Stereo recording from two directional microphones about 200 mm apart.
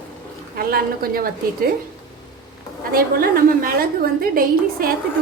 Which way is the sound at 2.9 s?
50° right (ahead or behind).